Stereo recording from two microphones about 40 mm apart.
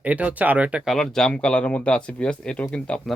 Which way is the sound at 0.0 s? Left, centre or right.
Right.